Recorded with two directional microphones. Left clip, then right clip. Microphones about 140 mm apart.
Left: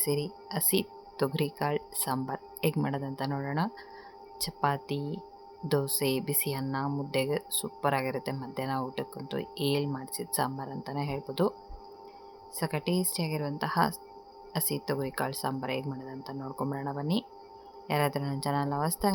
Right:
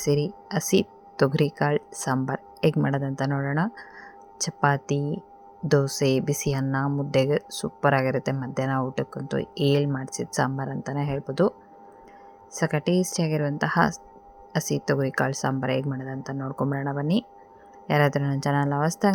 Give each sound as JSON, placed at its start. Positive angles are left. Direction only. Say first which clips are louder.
{"t": 0.0, "sound": "speech", "louder": "right 7 dB", "side_deg": -40}
{"t": 4.4, "sound": "speech", "louder": "right 6 dB", "side_deg": -40}
{"t": 12.5, "sound": "speech", "louder": "right 7 dB", "side_deg": -40}